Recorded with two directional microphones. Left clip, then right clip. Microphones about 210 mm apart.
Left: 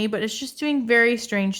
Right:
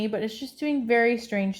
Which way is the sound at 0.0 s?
25° left (ahead or behind).